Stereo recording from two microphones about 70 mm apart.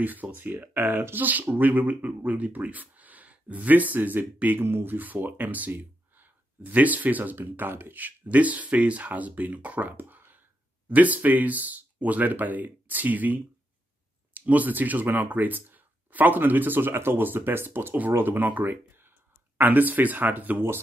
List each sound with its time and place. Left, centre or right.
0.0 s speech: right